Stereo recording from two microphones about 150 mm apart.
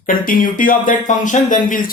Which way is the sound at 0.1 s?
65° left (ahead or behind).